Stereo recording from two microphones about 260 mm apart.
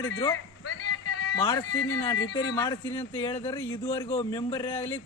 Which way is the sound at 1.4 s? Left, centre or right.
Centre.